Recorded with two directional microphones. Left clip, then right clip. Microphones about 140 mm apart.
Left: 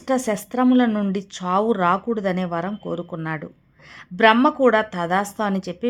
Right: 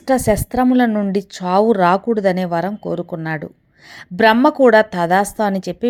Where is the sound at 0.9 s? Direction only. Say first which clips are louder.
Right 4 dB; 10° right (ahead or behind).